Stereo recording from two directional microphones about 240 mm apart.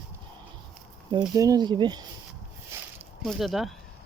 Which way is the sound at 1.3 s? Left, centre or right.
Centre.